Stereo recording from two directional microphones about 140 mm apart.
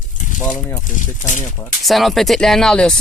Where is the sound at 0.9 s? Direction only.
65° left (ahead or behind).